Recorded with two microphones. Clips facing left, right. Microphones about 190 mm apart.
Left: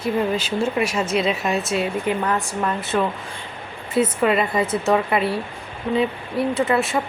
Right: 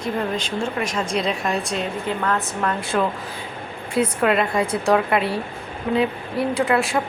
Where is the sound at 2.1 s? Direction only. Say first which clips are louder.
Left 1 dB; 15° left (ahead or behind).